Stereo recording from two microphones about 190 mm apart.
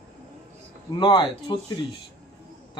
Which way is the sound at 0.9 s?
25° left (ahead or behind).